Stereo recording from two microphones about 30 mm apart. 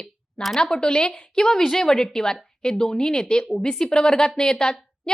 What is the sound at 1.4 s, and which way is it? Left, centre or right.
A woman's voice, centre.